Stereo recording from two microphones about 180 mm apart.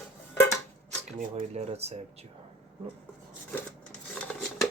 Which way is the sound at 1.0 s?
35° right (ahead or behind).